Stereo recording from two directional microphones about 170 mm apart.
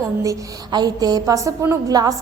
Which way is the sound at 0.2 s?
20° right (ahead or behind).